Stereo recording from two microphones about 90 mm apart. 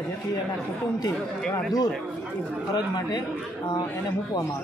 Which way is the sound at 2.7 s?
50° left (ahead or behind).